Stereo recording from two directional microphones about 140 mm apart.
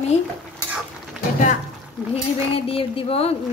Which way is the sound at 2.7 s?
40° left (ahead or behind).